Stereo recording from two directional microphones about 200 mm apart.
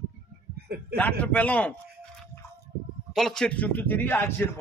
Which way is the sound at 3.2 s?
Centre (ahead or behind).